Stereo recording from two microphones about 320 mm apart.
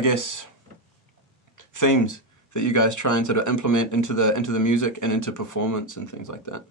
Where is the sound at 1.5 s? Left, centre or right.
Left.